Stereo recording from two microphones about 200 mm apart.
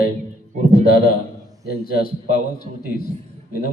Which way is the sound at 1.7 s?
50° left (ahead or behind).